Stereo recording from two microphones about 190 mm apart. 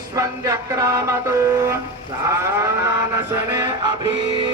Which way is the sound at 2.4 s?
15° right (ahead or behind).